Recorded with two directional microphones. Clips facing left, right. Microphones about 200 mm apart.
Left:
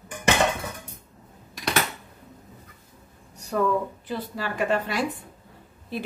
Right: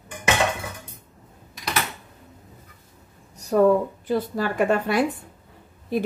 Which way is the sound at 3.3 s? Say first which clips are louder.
Right 7 dB; 40° right (ahead or behind).